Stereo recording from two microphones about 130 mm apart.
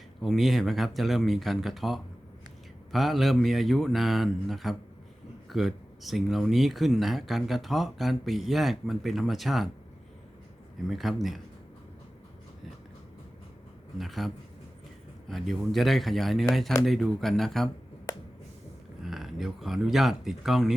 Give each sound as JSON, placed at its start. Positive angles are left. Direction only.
{"t": 0.2, "sound": "speech", "side_deg": 0}
{"t": 10.8, "sound": "speech", "side_deg": 0}
{"t": 14.0, "sound": "speech", "side_deg": 0}
{"t": 19.0, "sound": "speech", "side_deg": 0}